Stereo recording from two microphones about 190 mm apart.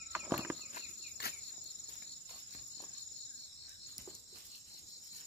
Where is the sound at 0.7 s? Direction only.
55° left (ahead or behind).